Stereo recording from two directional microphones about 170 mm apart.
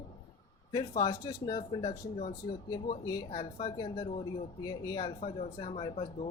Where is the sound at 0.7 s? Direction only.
25° left (ahead or behind).